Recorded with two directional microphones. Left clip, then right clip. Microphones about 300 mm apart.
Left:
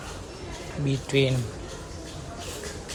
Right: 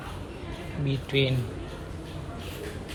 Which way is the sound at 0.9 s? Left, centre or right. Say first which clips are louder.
Left 2 dB; centre.